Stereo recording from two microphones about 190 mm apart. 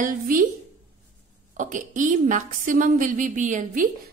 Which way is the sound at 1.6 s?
40° right (ahead or behind).